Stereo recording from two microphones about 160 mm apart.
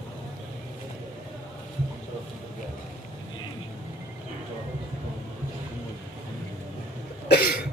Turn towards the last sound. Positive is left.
turn(degrees=70)  # may be behind; listen again after turning